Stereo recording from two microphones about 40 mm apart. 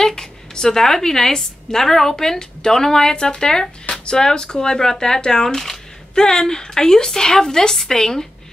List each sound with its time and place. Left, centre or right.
0.0 s a woman's voice: centre